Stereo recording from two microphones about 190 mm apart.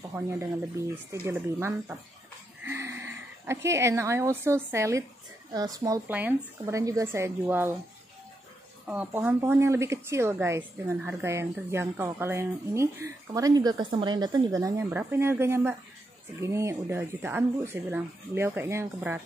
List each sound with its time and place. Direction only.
0.1 s a woman's voice: 15° right (ahead or behind)
8.8 s speech: 5° right (ahead or behind)